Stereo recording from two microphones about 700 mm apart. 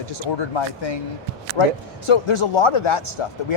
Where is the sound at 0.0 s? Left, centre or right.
Left.